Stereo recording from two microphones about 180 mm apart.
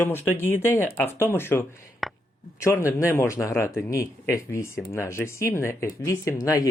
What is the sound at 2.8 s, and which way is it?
Speech, 15° left (ahead or behind).